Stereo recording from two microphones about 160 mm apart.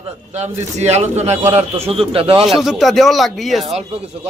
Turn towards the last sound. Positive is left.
turn(degrees=0)  # may be behind; listen again after turning